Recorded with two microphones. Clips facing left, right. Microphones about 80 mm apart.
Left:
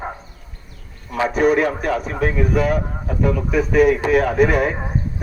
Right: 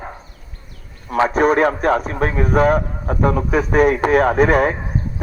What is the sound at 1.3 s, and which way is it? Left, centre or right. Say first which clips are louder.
A man's voice: even; right.